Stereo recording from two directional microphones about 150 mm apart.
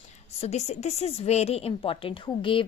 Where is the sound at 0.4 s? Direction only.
45° left (ahead or behind).